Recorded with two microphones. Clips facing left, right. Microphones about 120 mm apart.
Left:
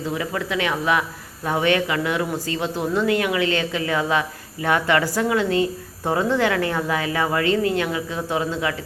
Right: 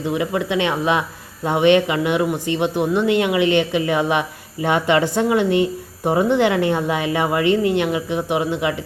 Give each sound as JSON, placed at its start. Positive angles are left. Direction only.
{"t": 0.0, "sound": "speech", "side_deg": -20}